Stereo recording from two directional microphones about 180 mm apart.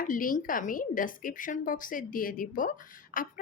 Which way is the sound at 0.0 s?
50° left (ahead or behind).